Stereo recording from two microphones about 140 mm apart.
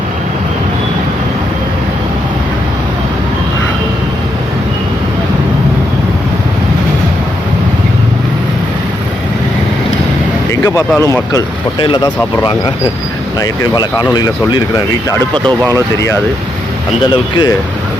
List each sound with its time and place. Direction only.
10.5 s speech: 20° left (ahead or behind)
15.3 s speech: 30° right (ahead or behind)